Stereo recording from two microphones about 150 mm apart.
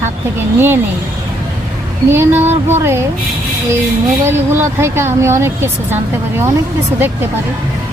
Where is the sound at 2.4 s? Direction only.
45° right (ahead or behind).